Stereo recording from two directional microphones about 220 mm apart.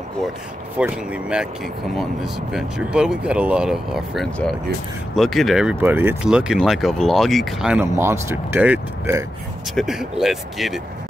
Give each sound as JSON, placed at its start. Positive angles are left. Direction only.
{"t": 0.7, "sound": "speech", "side_deg": -5}
{"t": 2.5, "sound": "speech", "side_deg": -5}